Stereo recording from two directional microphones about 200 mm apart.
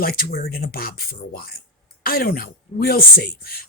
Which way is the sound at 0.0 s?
50° left (ahead or behind).